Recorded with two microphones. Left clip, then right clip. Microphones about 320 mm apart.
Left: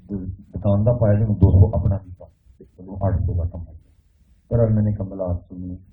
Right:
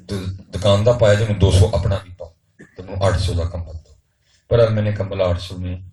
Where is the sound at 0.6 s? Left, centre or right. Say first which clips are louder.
Right 7 dB; right.